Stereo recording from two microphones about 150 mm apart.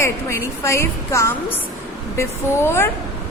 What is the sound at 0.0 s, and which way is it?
A woman's voice, 20° left (ahead or behind).